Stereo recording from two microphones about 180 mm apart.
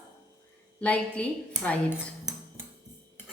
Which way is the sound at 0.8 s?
5° left (ahead or behind).